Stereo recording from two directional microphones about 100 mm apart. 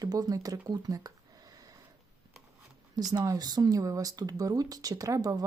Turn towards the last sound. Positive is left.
turn(degrees=-40)  # may be behind; listen again after turning